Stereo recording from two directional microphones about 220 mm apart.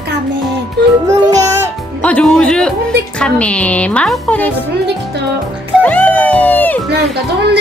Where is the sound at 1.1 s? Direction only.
15° right (ahead or behind).